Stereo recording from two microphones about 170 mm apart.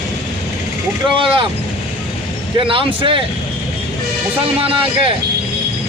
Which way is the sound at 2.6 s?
30° right (ahead or behind).